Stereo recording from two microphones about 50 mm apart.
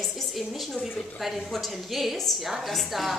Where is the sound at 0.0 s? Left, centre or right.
Centre.